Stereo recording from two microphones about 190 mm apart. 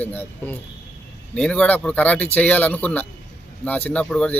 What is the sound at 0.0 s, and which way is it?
Speech, 10° left (ahead or behind).